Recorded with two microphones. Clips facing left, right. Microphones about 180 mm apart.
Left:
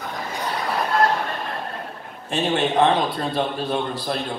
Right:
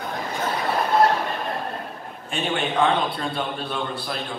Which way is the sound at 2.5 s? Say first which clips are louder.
Left 3 dB; 40° left (ahead or behind).